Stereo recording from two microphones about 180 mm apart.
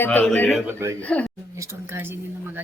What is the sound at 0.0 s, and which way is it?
Speech, 10° left (ahead or behind).